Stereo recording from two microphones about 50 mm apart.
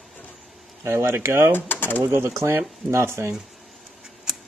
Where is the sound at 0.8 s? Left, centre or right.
Right.